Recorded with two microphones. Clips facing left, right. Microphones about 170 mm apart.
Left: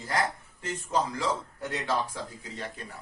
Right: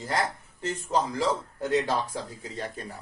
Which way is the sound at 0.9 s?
25° right (ahead or behind).